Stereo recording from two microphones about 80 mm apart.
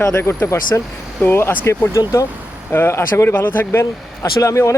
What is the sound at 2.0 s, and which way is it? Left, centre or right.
Speech, left.